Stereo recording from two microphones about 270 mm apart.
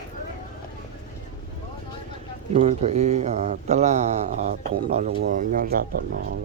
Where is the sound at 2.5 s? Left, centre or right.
Right.